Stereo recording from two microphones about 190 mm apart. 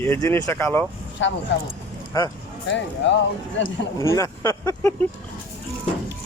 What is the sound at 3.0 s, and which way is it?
Speech, 70° left (ahead or behind).